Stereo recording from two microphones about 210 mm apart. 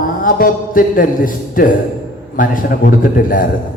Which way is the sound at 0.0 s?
40° left (ahead or behind).